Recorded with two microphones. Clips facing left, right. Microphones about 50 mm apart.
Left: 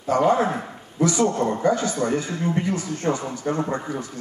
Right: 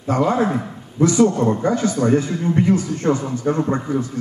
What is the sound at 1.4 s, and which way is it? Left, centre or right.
A man's voice, right.